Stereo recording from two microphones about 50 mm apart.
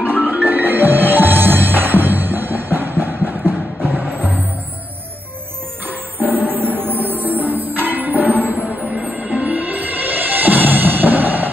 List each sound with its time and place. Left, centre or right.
0.1 s music: right
6.1 s music: right